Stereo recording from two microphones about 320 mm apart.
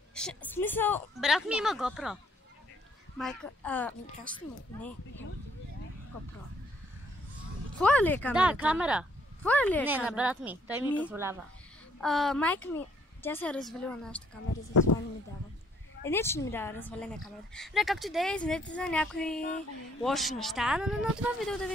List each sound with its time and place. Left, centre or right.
0.1 s speech: centre
3.2 s speech: centre
7.8 s speech: centre
11.1 s speech: centre
14.7 s speech: left
16.0 s speech: centre